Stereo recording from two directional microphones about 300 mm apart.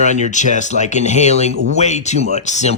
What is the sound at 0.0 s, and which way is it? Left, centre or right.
Speech, left.